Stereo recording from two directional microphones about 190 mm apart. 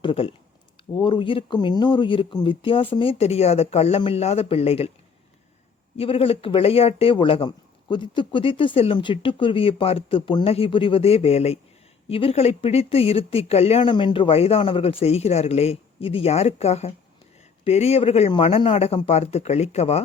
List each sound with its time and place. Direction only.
0.0 s speech: 30° left (ahead or behind)
6.0 s speech: 30° left (ahead or behind)